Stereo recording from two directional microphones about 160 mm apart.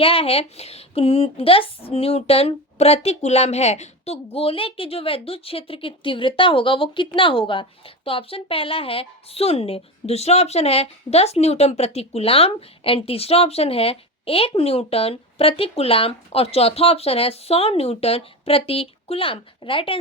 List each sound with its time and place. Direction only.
0.0 s a woman's voice: 35° left (ahead or behind)